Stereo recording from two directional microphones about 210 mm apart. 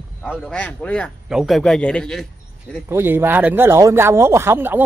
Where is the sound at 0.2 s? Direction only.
5° left (ahead or behind).